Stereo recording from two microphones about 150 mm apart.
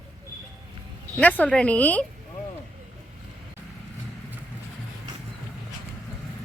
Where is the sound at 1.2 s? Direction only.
10° left (ahead or behind).